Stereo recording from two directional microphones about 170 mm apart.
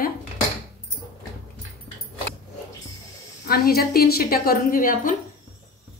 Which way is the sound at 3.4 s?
60° left (ahead or behind).